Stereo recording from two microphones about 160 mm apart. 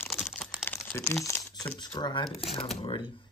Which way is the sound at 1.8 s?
30° left (ahead or behind).